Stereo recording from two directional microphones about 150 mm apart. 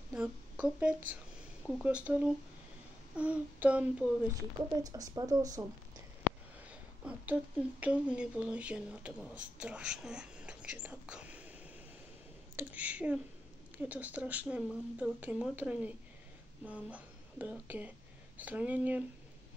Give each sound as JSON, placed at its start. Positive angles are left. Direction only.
{"t": 0.1, "sound": "speech", "side_deg": -10}
{"t": 4.8, "sound": "speech", "side_deg": -25}
{"t": 6.7, "sound": "a sound", "side_deg": -10}
{"t": 7.8, "sound": "speech", "side_deg": -10}
{"t": 12.5, "sound": "speech", "side_deg": -10}